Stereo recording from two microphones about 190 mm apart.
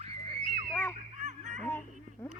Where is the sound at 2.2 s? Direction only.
10° left (ahead or behind).